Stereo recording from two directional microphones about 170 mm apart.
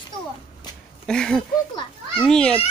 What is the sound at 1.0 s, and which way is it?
Speech, 5° left (ahead or behind).